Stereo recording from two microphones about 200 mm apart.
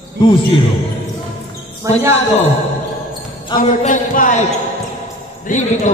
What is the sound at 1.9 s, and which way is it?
Speech, 15° right (ahead or behind).